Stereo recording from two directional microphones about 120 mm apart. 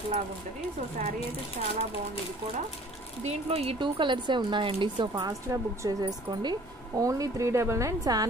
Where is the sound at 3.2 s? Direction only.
55° right (ahead or behind).